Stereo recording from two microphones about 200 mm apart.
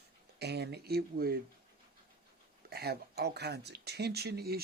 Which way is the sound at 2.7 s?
50° right (ahead or behind).